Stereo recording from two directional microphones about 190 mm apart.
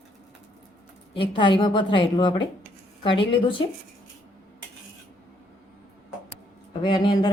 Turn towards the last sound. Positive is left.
turn(degrees=25)  # may be behind; listen again after turning